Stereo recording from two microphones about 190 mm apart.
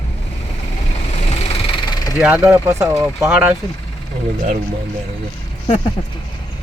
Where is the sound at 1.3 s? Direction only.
30° left (ahead or behind).